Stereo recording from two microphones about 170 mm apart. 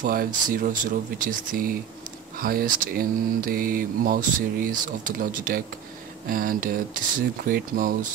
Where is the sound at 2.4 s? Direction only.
60° right (ahead or behind).